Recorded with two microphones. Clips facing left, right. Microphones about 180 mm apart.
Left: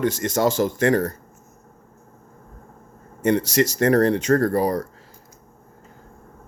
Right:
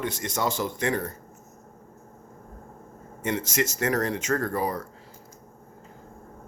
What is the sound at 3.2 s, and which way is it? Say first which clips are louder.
Speech: left 8 dB; 40° left (ahead or behind).